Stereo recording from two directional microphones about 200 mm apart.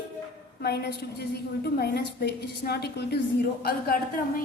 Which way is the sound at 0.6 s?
55° left (ahead or behind).